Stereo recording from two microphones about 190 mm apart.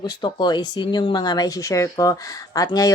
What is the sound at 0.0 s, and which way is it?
Speech, 20° left (ahead or behind).